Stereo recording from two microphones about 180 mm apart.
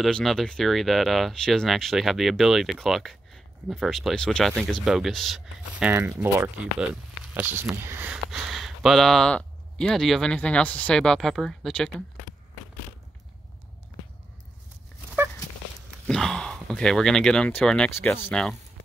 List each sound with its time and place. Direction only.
0.0 s speech: centre (ahead or behind)
16.1 s speech: 5° left (ahead or behind)